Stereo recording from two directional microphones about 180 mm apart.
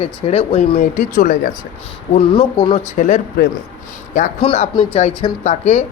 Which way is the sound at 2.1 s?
30° left (ahead or behind).